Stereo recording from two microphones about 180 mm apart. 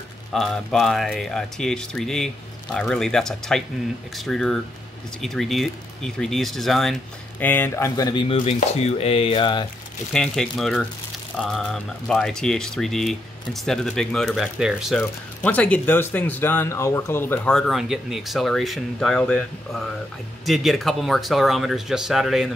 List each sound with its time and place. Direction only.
0.3 s speech: centre (ahead or behind); by 8.5 s 30° left (ahead or behind)
8.5 s chopping: 35° left (ahead or behind)
10.1 s speech: 5° left (ahead or behind)